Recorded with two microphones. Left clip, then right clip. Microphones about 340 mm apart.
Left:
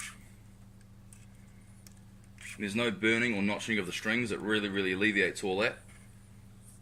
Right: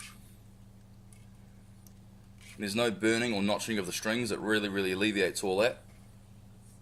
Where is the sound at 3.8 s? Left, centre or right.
Right.